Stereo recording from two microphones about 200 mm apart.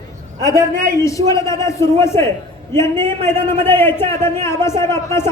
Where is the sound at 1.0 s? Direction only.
15° left (ahead or behind).